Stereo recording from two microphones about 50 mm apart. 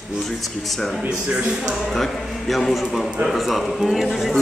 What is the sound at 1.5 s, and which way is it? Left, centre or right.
Speech, centre.